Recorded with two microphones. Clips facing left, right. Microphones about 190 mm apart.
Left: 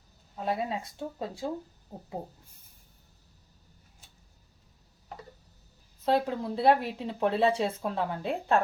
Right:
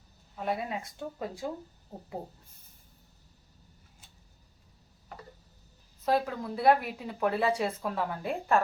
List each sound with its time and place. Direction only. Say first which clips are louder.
0.4 s speech: left 2 dB; 25° left (ahead or behind)
6.1 s speech: left 2 dB; 25° left (ahead or behind)